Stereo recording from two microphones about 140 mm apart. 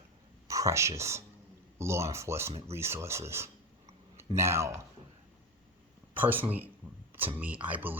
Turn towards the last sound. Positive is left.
turn(degrees=-10)  # may be behind; listen again after turning